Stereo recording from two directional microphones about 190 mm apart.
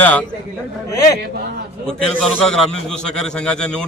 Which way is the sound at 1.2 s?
55° right (ahead or behind).